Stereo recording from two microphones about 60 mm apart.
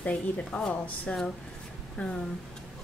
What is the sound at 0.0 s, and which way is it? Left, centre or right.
Speech, centre.